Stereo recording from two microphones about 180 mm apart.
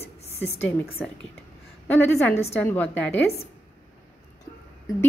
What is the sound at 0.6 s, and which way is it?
A woman's voice, 10° left (ahead or behind).